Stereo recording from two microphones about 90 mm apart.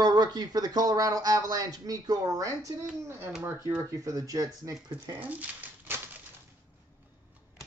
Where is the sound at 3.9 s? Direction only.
40° right (ahead or behind).